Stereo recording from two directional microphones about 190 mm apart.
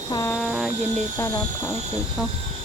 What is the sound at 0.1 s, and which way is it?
Speech, 15° left (ahead or behind).